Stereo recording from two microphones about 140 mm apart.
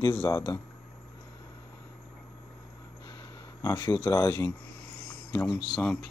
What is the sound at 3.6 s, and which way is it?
Speech, 25° left (ahead or behind).